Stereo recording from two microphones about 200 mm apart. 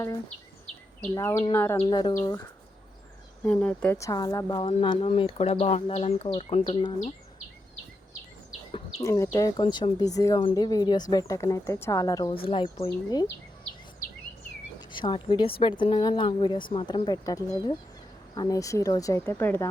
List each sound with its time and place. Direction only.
1.1 s speech: 15° left (ahead or behind)
1.8 s speech: 20° left (ahead or behind)
3.4 s speech: 5° left (ahead or behind)
4.0 s speech: 20° left (ahead or behind)
9.0 s speech: 15° left (ahead or behind)
14.9 s speech: 25° left (ahead or behind)